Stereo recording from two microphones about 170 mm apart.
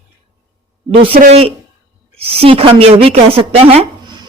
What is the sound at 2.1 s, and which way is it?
A woman's voice, 35° right (ahead or behind).